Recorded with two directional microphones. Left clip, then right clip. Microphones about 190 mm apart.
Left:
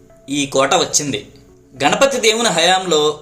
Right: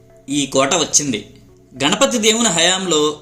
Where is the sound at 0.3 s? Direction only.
50° right (ahead or behind).